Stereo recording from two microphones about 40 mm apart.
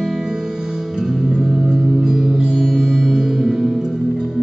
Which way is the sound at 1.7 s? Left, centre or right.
Centre.